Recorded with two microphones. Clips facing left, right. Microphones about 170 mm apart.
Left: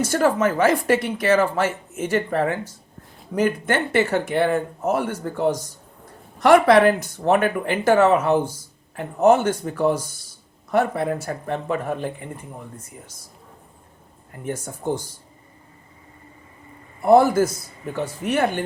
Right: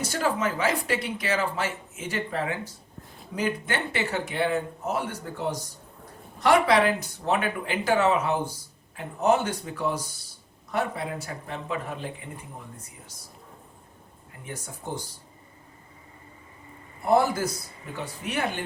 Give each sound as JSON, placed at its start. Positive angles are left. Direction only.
{"t": 0.0, "sound": "speech", "side_deg": 50}
{"t": 14.3, "sound": "speech", "side_deg": 45}
{"t": 17.0, "sound": "speech", "side_deg": 50}